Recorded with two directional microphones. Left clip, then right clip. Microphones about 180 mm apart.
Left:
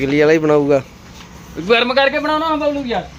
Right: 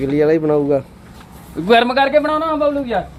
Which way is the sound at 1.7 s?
55° right (ahead or behind).